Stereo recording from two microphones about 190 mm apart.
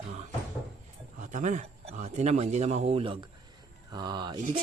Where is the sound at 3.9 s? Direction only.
20° right (ahead or behind).